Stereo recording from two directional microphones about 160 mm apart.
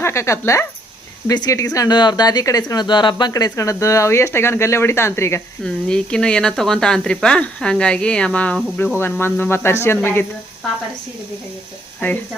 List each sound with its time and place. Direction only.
0.0 s speech: 15° left (ahead or behind)
5.6 s speech: 5° left (ahead or behind)
11.9 s speech: 10° left (ahead or behind)